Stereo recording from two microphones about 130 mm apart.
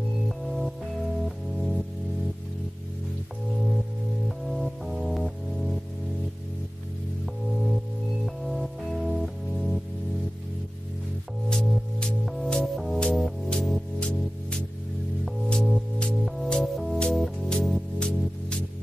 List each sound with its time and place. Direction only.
0.5 s music: centre (ahead or behind)
4.5 s music: centre (ahead or behind)
7.5 s music: centre (ahead or behind)
11.4 s music: 5° left (ahead or behind)